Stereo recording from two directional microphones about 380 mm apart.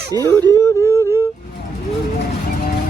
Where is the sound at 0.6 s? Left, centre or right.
Centre.